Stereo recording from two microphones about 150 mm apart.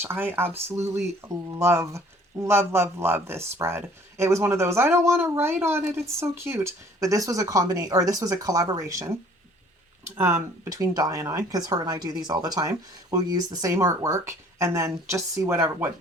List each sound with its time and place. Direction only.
0.0 s speech: 15° right (ahead or behind)
10.2 s speech: 15° right (ahead or behind)